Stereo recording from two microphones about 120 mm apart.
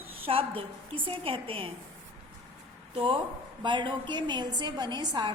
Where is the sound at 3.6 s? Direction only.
40° right (ahead or behind).